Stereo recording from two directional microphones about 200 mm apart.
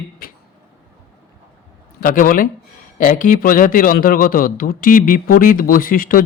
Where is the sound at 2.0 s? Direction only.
45° left (ahead or behind).